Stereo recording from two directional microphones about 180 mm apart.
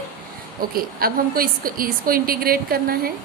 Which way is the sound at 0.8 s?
55° right (ahead or behind).